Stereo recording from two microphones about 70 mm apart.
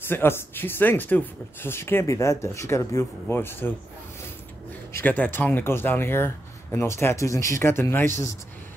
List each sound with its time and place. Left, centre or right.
0.1 s speech: left
2.0 s speech: left
3.3 s speech: left
4.9 s speech: left